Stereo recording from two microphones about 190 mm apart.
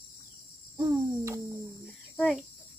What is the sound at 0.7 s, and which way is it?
Cricket, 15° right (ahead or behind).